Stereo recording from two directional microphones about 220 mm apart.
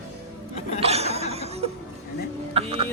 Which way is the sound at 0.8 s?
30° right (ahead or behind).